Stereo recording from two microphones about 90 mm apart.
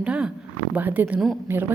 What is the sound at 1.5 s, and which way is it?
Speech, 25° right (ahead or behind).